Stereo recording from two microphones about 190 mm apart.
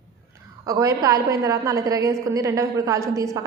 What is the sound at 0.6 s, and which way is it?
A woman's voice, 15° right (ahead or behind).